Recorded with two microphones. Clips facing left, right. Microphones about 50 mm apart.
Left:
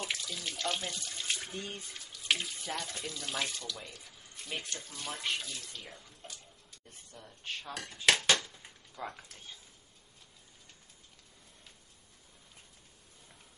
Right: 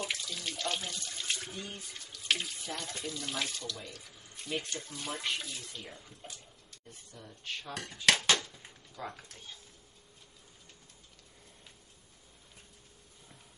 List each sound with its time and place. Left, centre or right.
0.0 s water: centre
1.5 s speech: left
1.9 s water tap: centre
2.6 s speech: centre
7.6 s speech: centre
8.3 s a sound: centre